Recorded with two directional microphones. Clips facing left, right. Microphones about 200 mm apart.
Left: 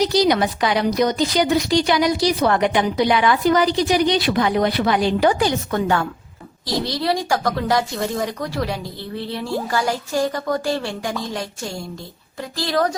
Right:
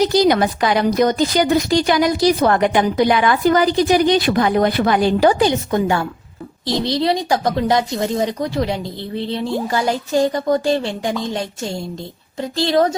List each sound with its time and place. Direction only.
0.0 s a woman's voice: 50° right (ahead or behind)
5.3 s speech: 25° right (ahead or behind)